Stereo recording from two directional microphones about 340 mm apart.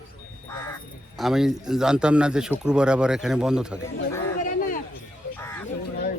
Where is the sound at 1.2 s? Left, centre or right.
Centre.